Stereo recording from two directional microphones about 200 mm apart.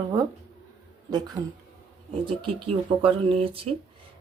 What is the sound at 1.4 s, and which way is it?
Speech, 30° right (ahead or behind).